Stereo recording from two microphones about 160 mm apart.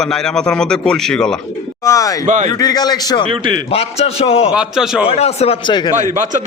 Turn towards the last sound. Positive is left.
turn(degrees=40)  # may be behind; listen again after turning